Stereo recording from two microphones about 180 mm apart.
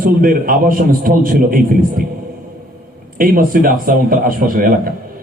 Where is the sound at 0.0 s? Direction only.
50° right (ahead or behind).